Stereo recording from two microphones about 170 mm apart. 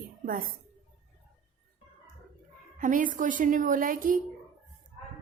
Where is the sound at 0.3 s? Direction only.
55° right (ahead or behind).